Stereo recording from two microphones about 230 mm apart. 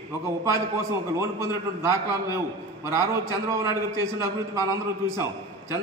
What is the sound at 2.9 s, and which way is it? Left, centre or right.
A man's voice, centre.